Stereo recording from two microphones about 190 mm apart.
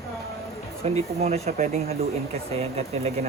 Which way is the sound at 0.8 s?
35° right (ahead or behind).